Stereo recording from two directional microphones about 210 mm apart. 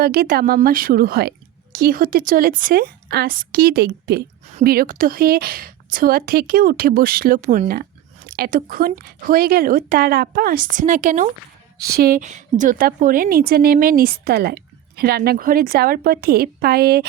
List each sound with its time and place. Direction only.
0.0 s a woman's voice: 45° right (ahead or behind)
11.8 s a woman's voice: 45° right (ahead or behind)